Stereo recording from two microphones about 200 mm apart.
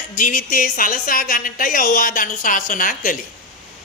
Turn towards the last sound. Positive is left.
turn(degrees=40)  # may be behind; listen again after turning